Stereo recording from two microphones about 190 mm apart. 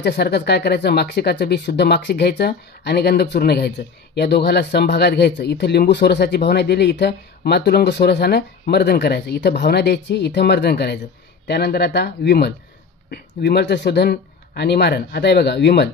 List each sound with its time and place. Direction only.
0.0 s speech: 60° left (ahead or behind)